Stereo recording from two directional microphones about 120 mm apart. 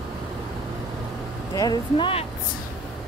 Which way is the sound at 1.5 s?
35° left (ahead or behind).